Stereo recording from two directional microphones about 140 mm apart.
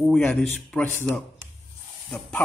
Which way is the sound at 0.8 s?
15° left (ahead or behind).